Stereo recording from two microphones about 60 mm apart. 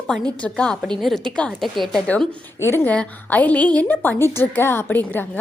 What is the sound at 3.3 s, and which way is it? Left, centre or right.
Speech, left.